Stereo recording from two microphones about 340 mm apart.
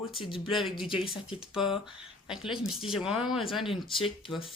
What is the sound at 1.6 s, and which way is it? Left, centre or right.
Speech, centre.